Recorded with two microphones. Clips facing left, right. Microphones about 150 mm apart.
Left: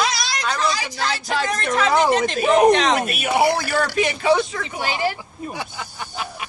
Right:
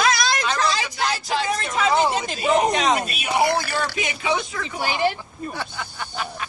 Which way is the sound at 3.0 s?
55° left (ahead or behind).